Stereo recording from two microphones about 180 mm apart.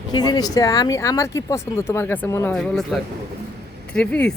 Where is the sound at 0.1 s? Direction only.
20° left (ahead or behind).